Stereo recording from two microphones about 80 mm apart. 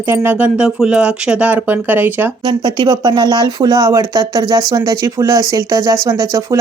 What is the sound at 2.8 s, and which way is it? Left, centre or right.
Speech, right.